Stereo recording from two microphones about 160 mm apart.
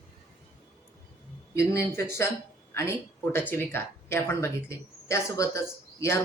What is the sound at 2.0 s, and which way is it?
Speech, 15° left (ahead or behind).